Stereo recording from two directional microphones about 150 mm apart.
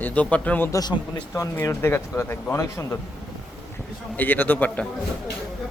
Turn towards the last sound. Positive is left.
turn(degrees=10)  # may be behind; listen again after turning